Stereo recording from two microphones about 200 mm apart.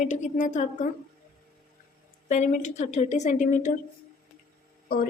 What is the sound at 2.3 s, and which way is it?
A woman's voice, 35° left (ahead or behind).